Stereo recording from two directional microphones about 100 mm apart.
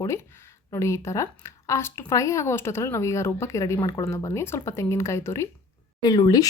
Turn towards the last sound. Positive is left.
turn(degrees=40)  # may be behind; listen again after turning